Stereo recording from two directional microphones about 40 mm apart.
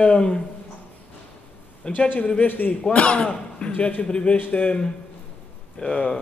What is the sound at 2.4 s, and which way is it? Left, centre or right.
Speech, left.